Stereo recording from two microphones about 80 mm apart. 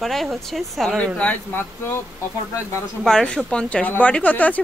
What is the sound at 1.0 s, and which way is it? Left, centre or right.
Speech, centre.